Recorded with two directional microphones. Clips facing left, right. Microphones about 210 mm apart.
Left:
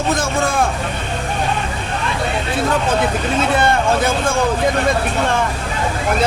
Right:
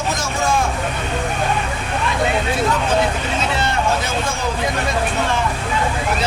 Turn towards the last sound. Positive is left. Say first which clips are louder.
# left 4 dB
turn(degrees=55)  # may be behind; listen again after turning